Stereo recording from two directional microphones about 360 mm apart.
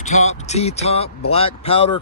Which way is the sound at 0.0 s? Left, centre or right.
Centre.